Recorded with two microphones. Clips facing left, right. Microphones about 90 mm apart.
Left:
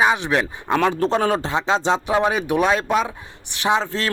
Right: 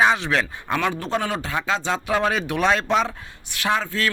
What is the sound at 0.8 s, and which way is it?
A man's voice, 35° left (ahead or behind).